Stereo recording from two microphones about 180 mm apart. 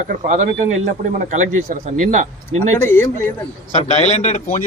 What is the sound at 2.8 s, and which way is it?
Speech, 15° left (ahead or behind).